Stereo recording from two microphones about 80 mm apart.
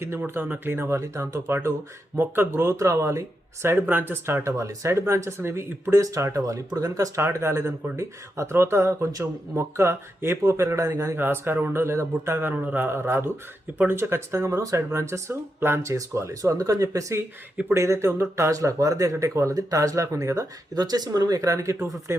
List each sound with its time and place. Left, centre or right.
0.0 s speech: right
4.4 s speech: right
6.0 s speech: right
7.2 s speech: right
11.2 s a man's voice: right